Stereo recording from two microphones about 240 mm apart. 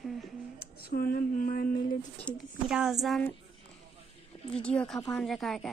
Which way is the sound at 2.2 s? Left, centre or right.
Centre.